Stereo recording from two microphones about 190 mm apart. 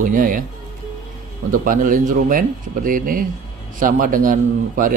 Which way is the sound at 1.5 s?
45° right (ahead or behind).